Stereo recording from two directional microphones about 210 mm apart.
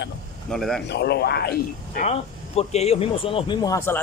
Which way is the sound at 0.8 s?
50° left (ahead or behind).